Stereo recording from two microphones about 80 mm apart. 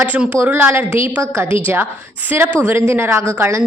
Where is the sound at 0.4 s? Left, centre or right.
Right.